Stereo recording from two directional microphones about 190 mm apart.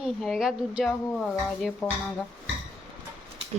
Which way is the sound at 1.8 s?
20° left (ahead or behind).